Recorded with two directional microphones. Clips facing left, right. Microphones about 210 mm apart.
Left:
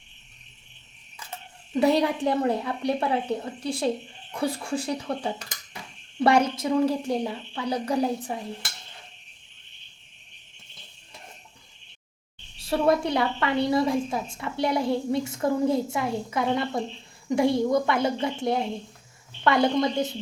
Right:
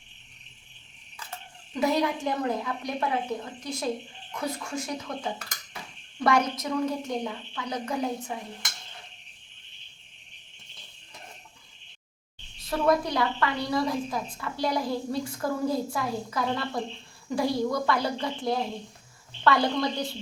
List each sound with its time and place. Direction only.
1.7 s a woman's voice: 30° left (ahead or behind)
12.6 s a woman's voice: 25° left (ahead or behind)